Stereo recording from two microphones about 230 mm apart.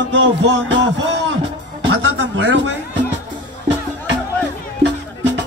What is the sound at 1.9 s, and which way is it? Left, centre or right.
Music, right.